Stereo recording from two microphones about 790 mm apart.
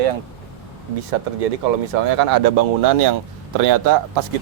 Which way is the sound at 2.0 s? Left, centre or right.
Right.